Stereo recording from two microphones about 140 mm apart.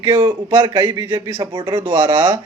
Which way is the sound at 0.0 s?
25° right (ahead or behind).